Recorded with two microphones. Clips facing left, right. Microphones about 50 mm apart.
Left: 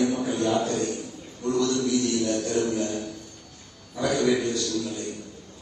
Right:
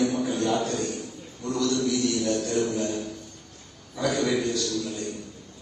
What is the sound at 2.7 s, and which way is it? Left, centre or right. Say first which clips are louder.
Speech: left 1 dB; right.